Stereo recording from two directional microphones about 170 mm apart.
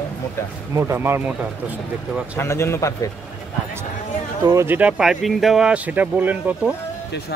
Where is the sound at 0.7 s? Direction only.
15° right (ahead or behind).